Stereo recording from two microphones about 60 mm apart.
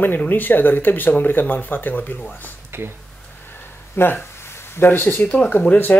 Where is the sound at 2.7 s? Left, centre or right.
Right.